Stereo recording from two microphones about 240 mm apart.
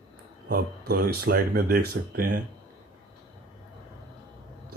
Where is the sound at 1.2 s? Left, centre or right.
Right.